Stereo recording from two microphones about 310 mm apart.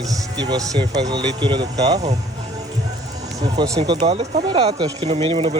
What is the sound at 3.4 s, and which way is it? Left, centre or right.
A man's voice, centre.